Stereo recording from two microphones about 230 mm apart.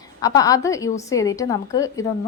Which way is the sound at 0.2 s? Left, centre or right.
Centre.